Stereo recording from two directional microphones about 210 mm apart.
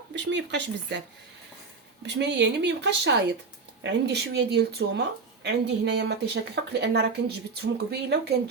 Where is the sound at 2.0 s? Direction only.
55° right (ahead or behind).